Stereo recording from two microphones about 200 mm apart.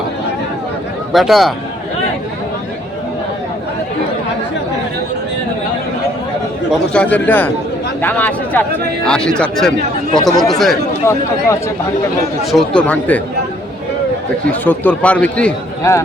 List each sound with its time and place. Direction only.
1.1 s speech: centre (ahead or behind)
6.7 s a man's voice: 5° left (ahead or behind)
10.2 s speech: 20° left (ahead or behind)
10.5 s speech: centre (ahead or behind)
11.0 s a man's voice: 15° left (ahead or behind)
12.5 s speech: 5° left (ahead or behind)
14.6 s a man's voice: 10° left (ahead or behind)